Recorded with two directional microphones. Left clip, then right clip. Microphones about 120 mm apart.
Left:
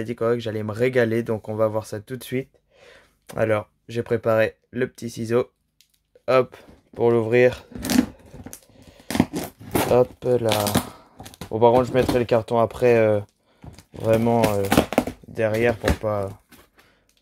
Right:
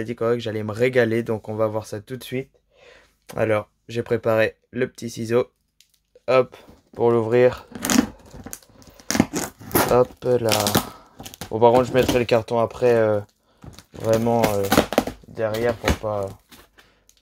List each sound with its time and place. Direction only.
0.0 s speech: 10° left (ahead or behind)
2.2 s a sound: 25° left (ahead or behind)
3.3 s speech: 5° left (ahead or behind)
6.2 s speech: 15° left (ahead or behind)
8.9 s a sound: 20° left (ahead or behind)
9.8 s speech: 5° left (ahead or behind)
10.4 s speech: 10° right (ahead or behind)
11.1 s speech: centre (ahead or behind)
12.4 s speech: 20° left (ahead or behind)
15.6 s speech: 35° left (ahead or behind)